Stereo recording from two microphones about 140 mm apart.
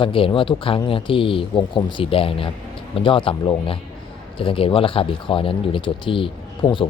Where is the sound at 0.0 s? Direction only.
40° left (ahead or behind).